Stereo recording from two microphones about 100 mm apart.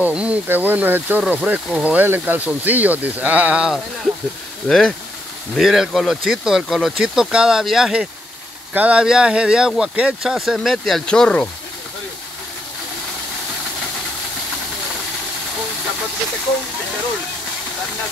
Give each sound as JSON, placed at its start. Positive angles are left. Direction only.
{"t": 0.0, "sound": "speech", "side_deg": -10}
{"t": 4.6, "sound": "speech", "side_deg": 5}